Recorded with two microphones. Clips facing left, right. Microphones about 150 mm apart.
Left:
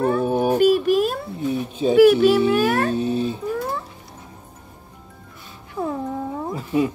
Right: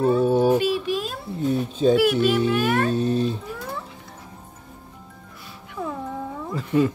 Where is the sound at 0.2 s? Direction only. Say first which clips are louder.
Right 2 dB; 15° left (ahead or behind).